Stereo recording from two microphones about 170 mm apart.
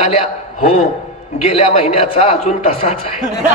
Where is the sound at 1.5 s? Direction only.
35° left (ahead or behind).